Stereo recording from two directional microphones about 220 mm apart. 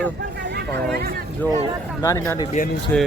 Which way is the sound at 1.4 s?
10° left (ahead or behind).